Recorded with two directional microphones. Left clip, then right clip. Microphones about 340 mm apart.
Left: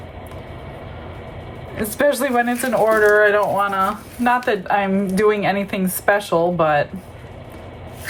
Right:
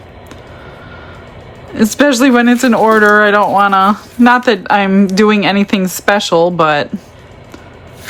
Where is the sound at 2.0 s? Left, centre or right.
Right.